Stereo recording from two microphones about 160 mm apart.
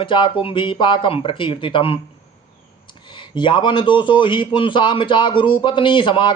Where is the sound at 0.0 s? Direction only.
30° left (ahead or behind).